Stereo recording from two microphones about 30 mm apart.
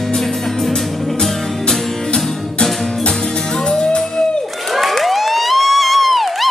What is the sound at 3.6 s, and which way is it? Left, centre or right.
Music, left.